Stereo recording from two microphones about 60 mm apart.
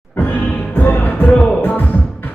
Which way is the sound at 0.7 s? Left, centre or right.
Left.